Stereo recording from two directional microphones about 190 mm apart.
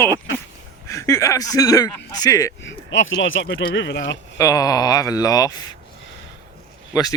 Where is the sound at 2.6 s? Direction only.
75° left (ahead or behind).